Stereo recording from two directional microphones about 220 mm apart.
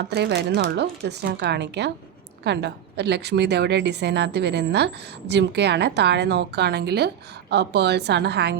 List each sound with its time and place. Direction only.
0.1 s a woman's voice: 50° right (ahead or behind)